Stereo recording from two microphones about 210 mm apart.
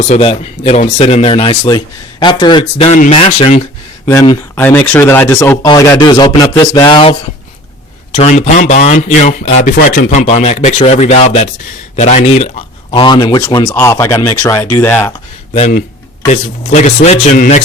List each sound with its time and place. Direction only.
0.0 s speech: 30° left (ahead or behind)
4.0 s speech: 15° left (ahead or behind)
15.5 s speech: 30° left (ahead or behind)